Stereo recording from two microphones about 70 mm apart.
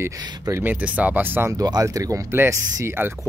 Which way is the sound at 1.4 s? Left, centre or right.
Right.